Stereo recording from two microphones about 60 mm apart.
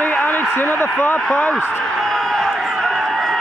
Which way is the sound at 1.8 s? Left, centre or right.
Centre.